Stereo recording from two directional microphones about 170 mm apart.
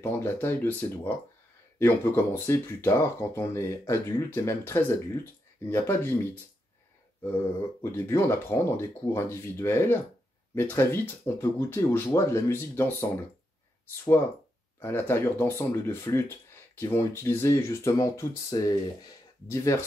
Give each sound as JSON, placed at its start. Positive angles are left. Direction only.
{"t": 0.0, "sound": "speech", "side_deg": 15}
{"t": 7.8, "sound": "speech", "side_deg": 15}
{"t": 14.8, "sound": "speech", "side_deg": 15}